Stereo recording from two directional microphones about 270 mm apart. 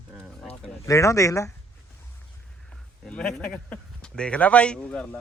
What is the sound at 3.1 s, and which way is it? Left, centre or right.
A man's voice, centre.